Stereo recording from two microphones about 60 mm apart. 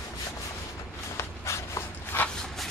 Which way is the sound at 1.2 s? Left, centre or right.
Left.